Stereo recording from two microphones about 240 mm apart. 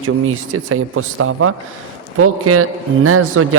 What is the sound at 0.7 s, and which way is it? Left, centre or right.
A man's voice, right.